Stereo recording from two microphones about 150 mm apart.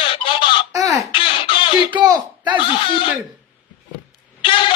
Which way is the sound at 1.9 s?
30° right (ahead or behind).